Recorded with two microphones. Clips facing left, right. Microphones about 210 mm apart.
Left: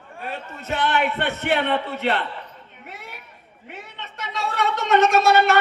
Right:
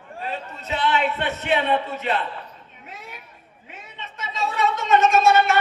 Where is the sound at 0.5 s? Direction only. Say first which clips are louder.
Left 1 dB; 50° left (ahead or behind); by 5.6 s 65° left (ahead or behind).